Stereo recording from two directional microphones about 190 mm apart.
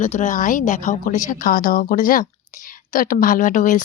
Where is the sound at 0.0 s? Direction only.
40° left (ahead or behind).